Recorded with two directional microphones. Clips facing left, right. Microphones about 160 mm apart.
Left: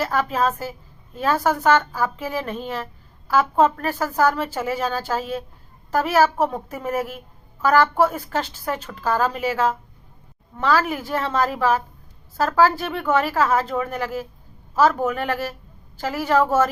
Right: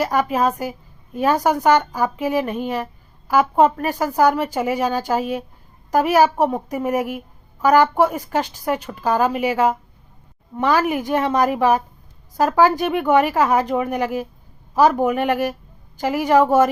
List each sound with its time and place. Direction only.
0.0 s a woman's voice: 15° right (ahead or behind)